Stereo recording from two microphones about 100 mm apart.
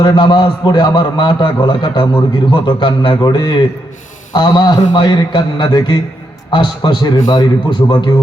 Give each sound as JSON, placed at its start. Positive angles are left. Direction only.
{"t": 0.0, "sound": "a man's voice", "side_deg": 50}